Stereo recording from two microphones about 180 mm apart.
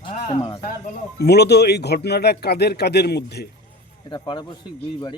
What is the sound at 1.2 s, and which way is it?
Speech, 65° left (ahead or behind).